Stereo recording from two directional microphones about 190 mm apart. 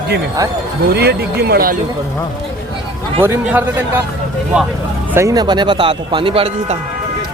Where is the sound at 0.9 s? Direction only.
55° right (ahead or behind).